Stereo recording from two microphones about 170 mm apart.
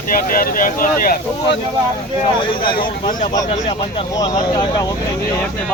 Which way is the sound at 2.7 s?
55° left (ahead or behind).